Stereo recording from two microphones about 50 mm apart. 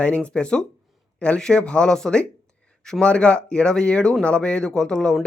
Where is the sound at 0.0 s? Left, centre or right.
Left.